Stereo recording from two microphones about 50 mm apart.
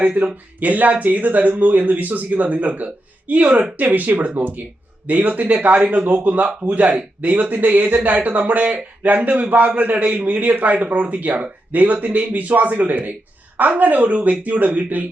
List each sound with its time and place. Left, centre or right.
0.0 s a man's voice: right